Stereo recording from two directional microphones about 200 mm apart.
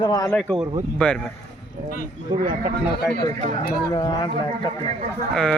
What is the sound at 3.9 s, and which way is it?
Speech, 20° left (ahead or behind).